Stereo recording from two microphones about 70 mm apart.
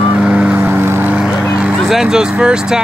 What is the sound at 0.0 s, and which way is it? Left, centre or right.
Vehicle, centre.